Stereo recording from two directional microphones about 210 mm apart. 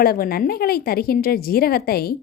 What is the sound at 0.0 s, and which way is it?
Speech, 45° left (ahead or behind).